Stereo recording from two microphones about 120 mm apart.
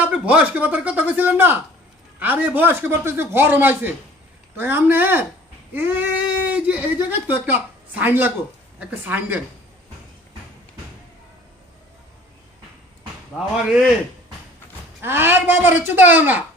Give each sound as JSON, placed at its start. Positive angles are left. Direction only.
{"t": 0.0, "sound": "speech", "side_deg": -10}
{"t": 13.7, "sound": "a man's voice", "side_deg": -5}
{"t": 15.0, "sound": "speech", "side_deg": -20}